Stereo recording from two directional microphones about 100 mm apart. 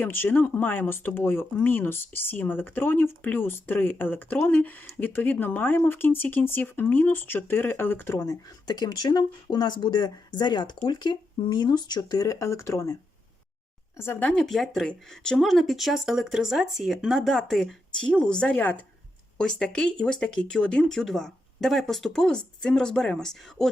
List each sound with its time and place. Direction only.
0.0 s speech: 20° left (ahead or behind)
8.3 s speech: 40° left (ahead or behind); by 14.4 s 15° left (ahead or behind)
14.4 s speech: centre (ahead or behind)